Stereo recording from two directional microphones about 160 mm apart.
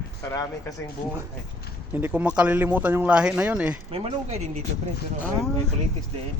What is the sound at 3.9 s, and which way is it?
Speech, 40° right (ahead or behind).